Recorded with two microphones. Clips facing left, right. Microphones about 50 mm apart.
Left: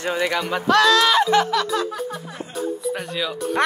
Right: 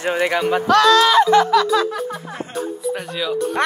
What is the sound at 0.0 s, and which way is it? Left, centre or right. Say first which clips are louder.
Speech: right 3 dB; right.